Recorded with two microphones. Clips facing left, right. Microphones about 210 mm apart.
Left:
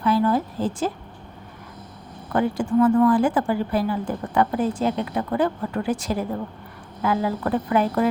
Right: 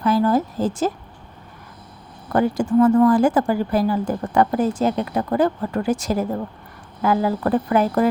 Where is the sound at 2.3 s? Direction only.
40° right (ahead or behind).